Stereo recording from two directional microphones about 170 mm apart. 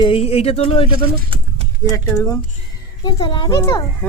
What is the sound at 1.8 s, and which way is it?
A child's voice, 20° left (ahead or behind).